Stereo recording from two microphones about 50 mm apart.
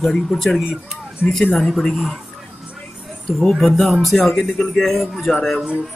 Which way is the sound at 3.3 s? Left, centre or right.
Centre.